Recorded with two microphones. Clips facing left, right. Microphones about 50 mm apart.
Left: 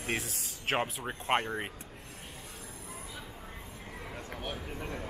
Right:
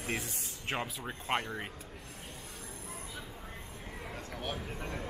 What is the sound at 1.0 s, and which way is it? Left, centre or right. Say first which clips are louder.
Speech: left 4 dB; left.